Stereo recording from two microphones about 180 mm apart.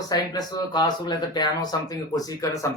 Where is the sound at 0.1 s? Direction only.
20° left (ahead or behind).